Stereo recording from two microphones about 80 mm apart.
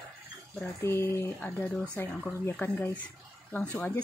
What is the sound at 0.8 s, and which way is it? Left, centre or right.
Speech, left.